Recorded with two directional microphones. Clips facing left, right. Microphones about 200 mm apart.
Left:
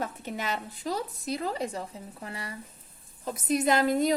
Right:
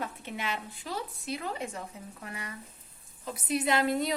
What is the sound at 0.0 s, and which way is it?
A woman's voice, 40° left (ahead or behind).